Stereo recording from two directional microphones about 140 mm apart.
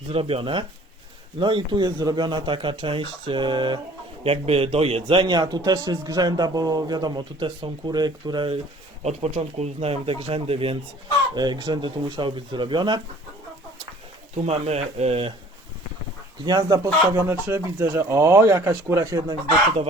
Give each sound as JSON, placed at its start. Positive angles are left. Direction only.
{"t": 0.1, "sound": "a man's voice", "side_deg": -40}
{"t": 4.2, "sound": "a man's voice", "side_deg": -45}
{"t": 9.0, "sound": "speech", "side_deg": -50}
{"t": 11.3, "sound": "a man's voice", "side_deg": -30}
{"t": 14.4, "sound": "speech", "side_deg": -50}
{"t": 16.5, "sound": "speech", "side_deg": -30}